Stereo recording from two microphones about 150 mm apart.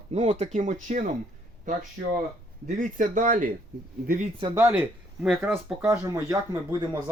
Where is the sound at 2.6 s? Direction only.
60° right (ahead or behind).